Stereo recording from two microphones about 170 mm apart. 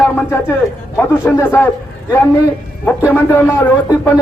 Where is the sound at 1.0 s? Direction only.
15° left (ahead or behind).